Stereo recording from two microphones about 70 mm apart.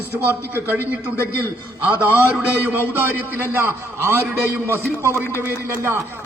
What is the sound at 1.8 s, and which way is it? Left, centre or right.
A man's voice, right.